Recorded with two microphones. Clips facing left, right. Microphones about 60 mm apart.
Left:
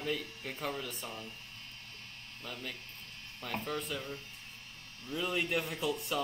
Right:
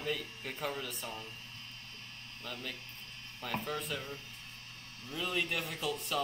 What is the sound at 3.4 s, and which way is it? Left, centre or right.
Speech, centre.